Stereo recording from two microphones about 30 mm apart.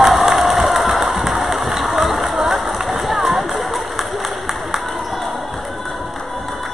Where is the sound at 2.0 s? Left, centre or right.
Centre.